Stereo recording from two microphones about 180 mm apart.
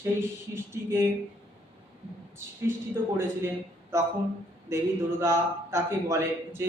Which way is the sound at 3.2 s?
15° right (ahead or behind).